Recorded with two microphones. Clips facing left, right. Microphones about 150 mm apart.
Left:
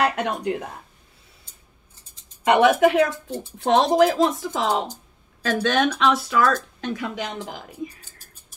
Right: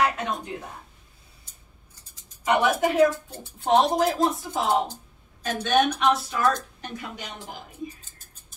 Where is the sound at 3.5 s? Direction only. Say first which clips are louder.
Left 3 dB; 90° left.